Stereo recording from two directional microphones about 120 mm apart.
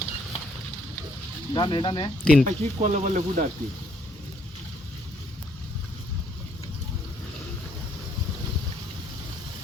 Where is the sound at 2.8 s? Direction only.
75° right (ahead or behind).